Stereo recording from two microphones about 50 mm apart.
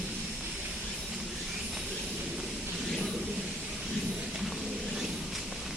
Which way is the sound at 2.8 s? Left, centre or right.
Centre.